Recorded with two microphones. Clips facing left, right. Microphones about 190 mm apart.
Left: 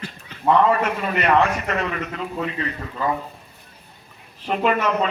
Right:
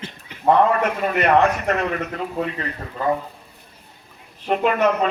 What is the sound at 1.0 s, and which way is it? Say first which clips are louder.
A man's voice: right 3 dB; 45° right (ahead or behind).